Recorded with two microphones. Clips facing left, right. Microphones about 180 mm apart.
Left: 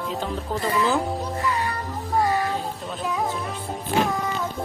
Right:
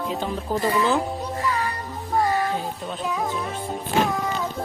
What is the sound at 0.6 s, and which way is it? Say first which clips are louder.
Speech: right 1 dB; centre (ahead or behind).